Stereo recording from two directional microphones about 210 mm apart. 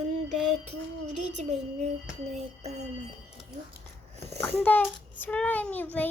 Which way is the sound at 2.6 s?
30° right (ahead or behind).